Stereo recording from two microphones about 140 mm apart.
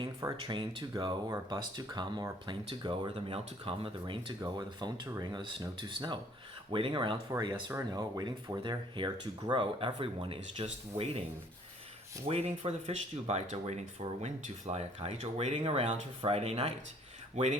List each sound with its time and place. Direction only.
0.3 s speech: 35° right (ahead or behind)
12.3 s speech: 45° right (ahead or behind)